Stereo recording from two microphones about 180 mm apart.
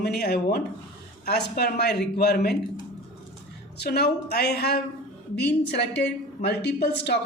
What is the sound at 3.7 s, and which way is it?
A woman's voice, 65° left (ahead or behind).